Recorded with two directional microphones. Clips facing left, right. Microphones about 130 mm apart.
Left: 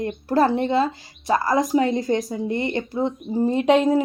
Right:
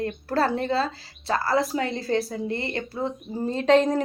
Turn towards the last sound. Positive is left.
turn(degrees=10)  # may be behind; listen again after turning